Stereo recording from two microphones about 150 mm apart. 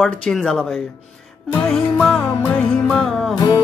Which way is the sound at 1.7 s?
5° left (ahead or behind).